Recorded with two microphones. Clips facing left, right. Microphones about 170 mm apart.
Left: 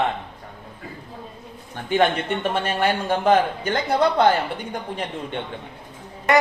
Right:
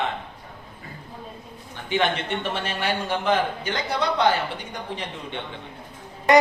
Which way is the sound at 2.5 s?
50° left (ahead or behind).